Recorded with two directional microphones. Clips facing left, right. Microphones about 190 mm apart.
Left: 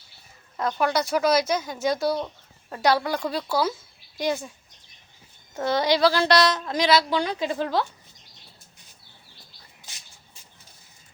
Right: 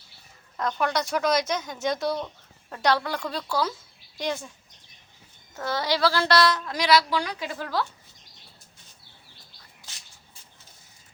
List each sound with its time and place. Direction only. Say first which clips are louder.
0.5 s speech: left 2 dB; 10° left (ahead or behind)
5.5 s a woman's voice: left 5 dB; 20° left (ahead or behind)